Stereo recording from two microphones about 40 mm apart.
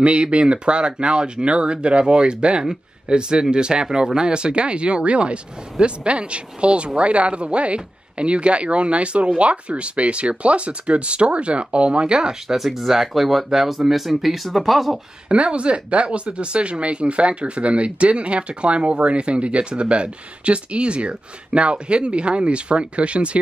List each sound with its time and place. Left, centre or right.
0.0 s speech: right
12.5 s speech: centre
15.2 s speech: right